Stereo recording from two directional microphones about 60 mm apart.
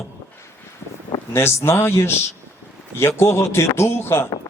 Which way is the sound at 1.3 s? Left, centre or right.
Left.